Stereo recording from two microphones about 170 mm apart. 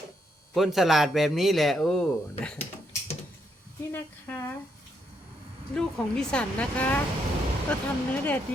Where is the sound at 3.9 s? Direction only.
15° left (ahead or behind).